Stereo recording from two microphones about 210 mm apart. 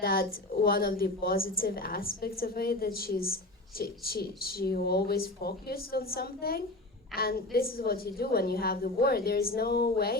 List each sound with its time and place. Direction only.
0.0 s a woman's voice: 45° left (ahead or behind)